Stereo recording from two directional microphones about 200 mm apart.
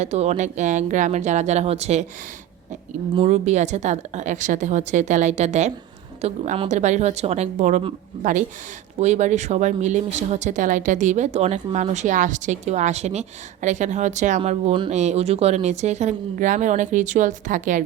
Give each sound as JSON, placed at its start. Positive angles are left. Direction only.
{"t": 0.0, "sound": "speech", "side_deg": -35}
{"t": 3.2, "sound": "speech", "side_deg": -35}